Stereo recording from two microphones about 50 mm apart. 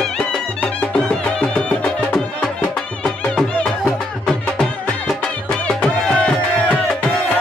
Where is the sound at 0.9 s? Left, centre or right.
Centre.